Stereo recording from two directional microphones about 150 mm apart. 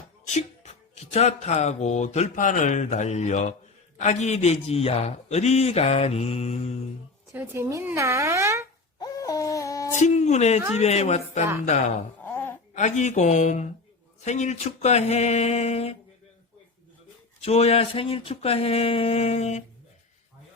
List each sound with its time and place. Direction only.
0.3 s speech: 50° left (ahead or behind)
7.3 s speech: 15° right (ahead or behind)
9.0 s a sound: 25° left (ahead or behind)
10.0 s speech: 50° left (ahead or behind)
12.2 s a sound: 15° left (ahead or behind)
12.7 s speech: 50° left (ahead or behind)
17.4 s speech: 45° left (ahead or behind)